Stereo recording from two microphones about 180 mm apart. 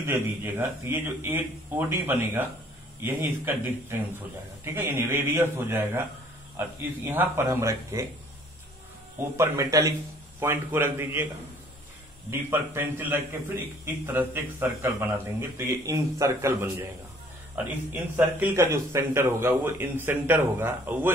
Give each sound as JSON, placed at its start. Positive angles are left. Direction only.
{"t": 0.0, "sound": "a man's voice", "side_deg": -10}
{"t": 4.7, "sound": "a man's voice", "side_deg": -15}
{"t": 7.1, "sound": "a man's voice", "side_deg": -10}
{"t": 9.4, "sound": "a man's voice", "side_deg": -20}
{"t": 12.3, "sound": "a man's voice", "side_deg": -15}